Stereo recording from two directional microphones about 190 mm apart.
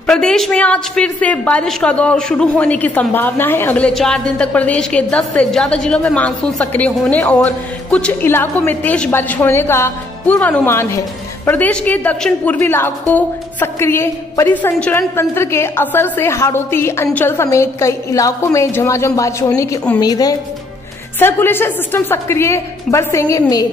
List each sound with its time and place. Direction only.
0.0 s a woman's voice: 5° left (ahead or behind)